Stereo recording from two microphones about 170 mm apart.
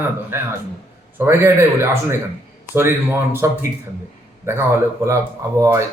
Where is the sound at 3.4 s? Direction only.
15° right (ahead or behind).